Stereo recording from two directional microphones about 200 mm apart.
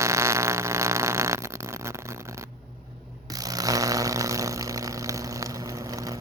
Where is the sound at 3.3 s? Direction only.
20° right (ahead or behind).